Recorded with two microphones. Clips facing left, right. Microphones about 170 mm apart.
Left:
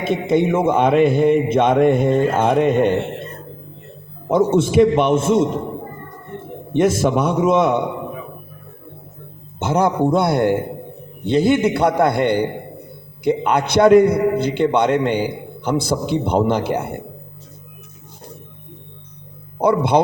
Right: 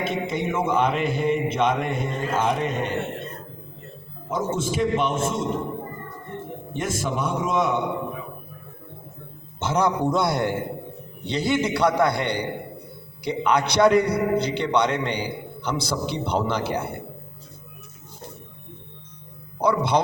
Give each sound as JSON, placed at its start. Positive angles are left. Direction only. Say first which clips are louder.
{"t": 0.0, "sound": "a man's voice", "louder": "left 8 dB", "side_deg": 55}
{"t": 4.3, "sound": "a man's voice", "louder": "left 10 dB", "side_deg": 65}
{"t": 6.7, "sound": "a man's voice", "louder": "left 11 dB", "side_deg": 70}
{"t": 9.6, "sound": "a man's voice", "louder": "left 5 dB", "side_deg": 50}
{"t": 19.6, "sound": "a man's voice", "louder": "left 5 dB", "side_deg": 55}